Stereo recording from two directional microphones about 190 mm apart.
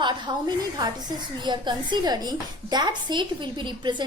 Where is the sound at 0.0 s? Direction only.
20° right (ahead or behind).